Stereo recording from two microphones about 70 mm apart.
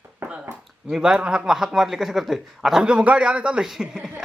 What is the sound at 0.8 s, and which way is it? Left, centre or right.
Speech, centre.